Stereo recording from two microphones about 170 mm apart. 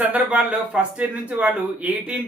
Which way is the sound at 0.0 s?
10° right (ahead or behind).